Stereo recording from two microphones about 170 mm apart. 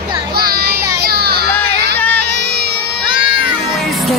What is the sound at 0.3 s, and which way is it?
Music, 65° right (ahead or behind).